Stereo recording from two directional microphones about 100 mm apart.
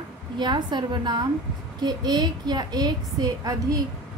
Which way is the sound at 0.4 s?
45° right (ahead or behind).